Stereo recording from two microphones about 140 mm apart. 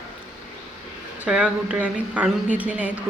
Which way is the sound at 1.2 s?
10° right (ahead or behind).